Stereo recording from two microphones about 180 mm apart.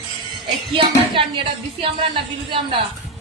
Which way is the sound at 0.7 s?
30° right (ahead or behind).